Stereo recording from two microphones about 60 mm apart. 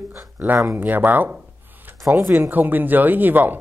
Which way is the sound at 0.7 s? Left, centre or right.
Right.